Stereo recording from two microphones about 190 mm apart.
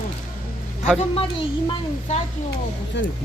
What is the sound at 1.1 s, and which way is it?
Speech, 30° left (ahead or behind).